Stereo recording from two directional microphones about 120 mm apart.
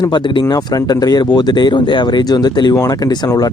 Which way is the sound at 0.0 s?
40° left (ahead or behind).